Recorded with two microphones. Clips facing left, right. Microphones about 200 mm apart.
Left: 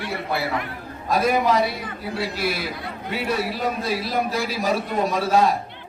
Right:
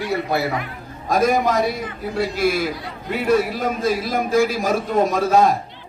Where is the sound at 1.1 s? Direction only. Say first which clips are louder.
Right 2 dB; 45° right (ahead or behind).